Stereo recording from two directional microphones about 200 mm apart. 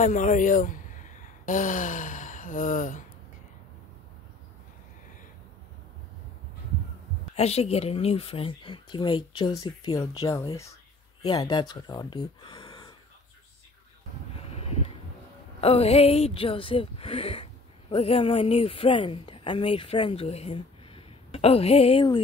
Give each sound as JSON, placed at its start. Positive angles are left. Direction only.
{"t": 0.0, "sound": "speech", "side_deg": 40}
{"t": 7.3, "sound": "speech", "side_deg": 30}
{"t": 15.6, "sound": "speech", "side_deg": 30}